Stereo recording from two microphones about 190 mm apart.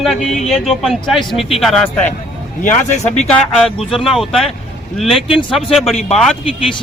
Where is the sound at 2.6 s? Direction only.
40° left (ahead or behind).